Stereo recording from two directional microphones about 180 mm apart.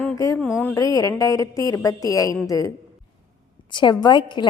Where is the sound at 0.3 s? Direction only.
10° left (ahead or behind).